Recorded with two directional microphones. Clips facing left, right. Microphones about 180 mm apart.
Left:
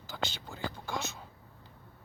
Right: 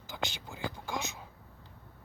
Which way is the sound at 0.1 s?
10° right (ahead or behind).